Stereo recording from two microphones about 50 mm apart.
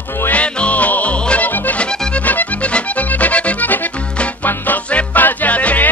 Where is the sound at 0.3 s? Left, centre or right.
Left.